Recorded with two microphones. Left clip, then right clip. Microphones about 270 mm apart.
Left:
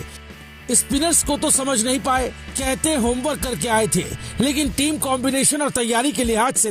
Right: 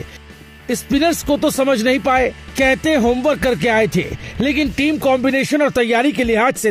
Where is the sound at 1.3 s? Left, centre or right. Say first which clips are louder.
Right 6 dB; left.